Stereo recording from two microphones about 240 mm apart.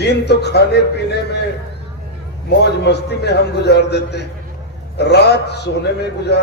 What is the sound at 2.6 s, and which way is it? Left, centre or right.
A man's voice, left.